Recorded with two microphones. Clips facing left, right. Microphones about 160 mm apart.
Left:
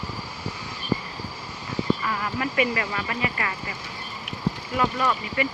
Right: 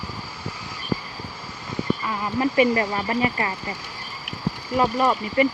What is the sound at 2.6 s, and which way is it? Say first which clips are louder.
Speech: right 5 dB; 30° right (ahead or behind).